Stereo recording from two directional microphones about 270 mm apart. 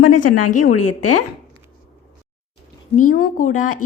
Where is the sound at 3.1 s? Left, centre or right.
Left.